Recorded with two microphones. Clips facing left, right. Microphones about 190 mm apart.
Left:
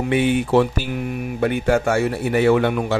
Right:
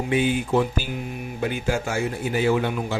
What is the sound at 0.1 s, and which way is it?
Speech, 65° left (ahead or behind).